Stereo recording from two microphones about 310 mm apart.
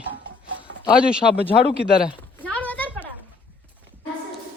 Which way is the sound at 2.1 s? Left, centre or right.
Centre.